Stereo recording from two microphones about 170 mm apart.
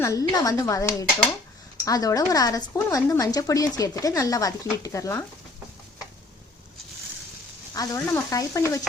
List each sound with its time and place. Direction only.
0.0 s speech: 20° left (ahead or behind)
7.8 s frying: 20° left (ahead or behind)